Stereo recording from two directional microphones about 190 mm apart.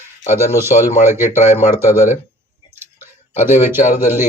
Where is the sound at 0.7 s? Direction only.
40° left (ahead or behind).